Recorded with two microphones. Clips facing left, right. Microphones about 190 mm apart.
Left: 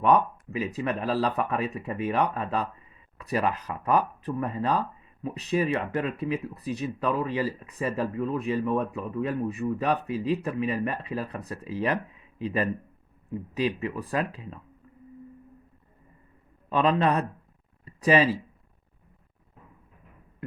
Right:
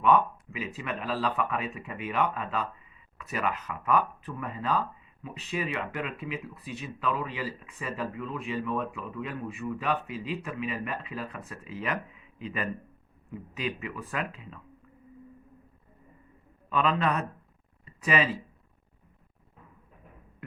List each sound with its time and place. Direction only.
0.0 s speech: 35° left (ahead or behind)
16.6 s speech: 35° left (ahead or behind)
17.8 s a sound: 35° left (ahead or behind)